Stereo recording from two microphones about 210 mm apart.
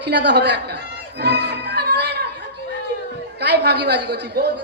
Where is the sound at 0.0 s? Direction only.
55° right (ahead or behind).